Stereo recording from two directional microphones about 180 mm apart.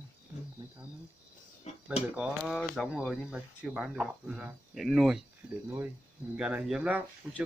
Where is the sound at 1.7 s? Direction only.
40° left (ahead or behind).